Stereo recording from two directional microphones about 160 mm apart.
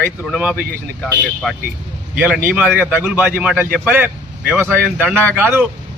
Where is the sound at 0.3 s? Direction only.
5° right (ahead or behind).